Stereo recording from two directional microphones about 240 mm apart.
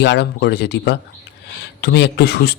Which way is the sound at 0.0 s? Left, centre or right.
Left.